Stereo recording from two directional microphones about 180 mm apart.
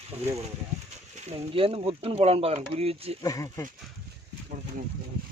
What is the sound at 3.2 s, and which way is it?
Speech, 20° left (ahead or behind).